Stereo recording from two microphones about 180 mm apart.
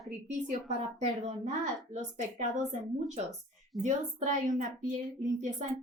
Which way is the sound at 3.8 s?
40° right (ahead or behind).